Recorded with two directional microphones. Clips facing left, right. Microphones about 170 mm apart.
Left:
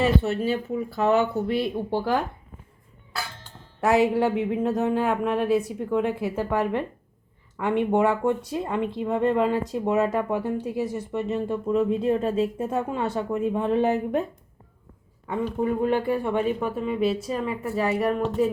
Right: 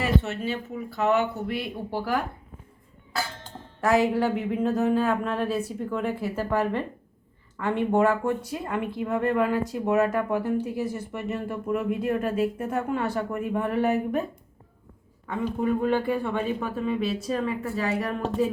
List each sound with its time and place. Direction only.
0.0 s speech: 35° left (ahead or behind)
3.8 s speech: 20° left (ahead or behind)
15.6 s speech: 20° left (ahead or behind)